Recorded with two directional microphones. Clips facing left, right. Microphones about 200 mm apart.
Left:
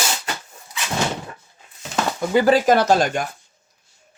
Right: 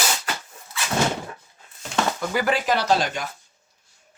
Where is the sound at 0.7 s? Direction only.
15° left (ahead or behind).